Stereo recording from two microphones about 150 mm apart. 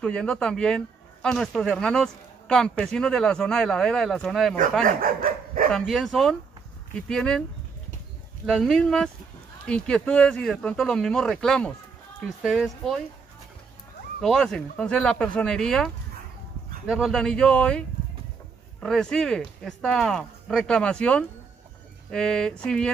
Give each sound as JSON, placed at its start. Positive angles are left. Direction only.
{"t": 0.0, "sound": "speech", "side_deg": 5}
{"t": 4.8, "sound": "dog", "side_deg": -65}
{"t": 5.7, "sound": "speech", "side_deg": 5}
{"t": 8.5, "sound": "speech", "side_deg": 0}
{"t": 14.2, "sound": "speech", "side_deg": 0}
{"t": 16.9, "sound": "speech", "side_deg": 0}